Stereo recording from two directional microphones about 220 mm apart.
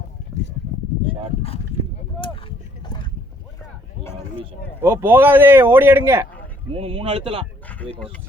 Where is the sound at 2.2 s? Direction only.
25° left (ahead or behind).